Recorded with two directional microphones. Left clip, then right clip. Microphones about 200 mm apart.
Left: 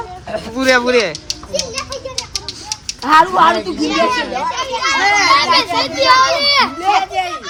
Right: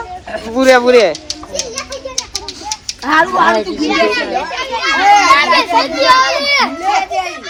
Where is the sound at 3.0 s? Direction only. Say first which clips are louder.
Left 2 dB; 40° left (ahead or behind).